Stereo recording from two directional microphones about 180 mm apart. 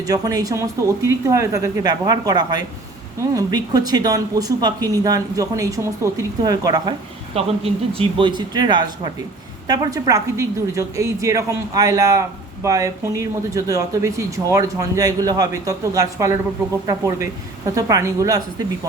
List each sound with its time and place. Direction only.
0.1 s speech: 20° right (ahead or behind)
7.3 s a woman's voice: 30° right (ahead or behind)